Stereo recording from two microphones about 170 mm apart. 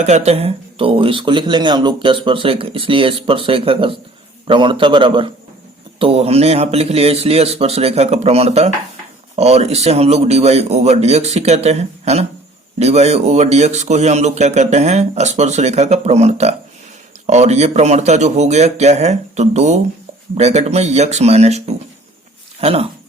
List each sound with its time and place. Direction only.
0.0 s a man's voice: 40° right (ahead or behind)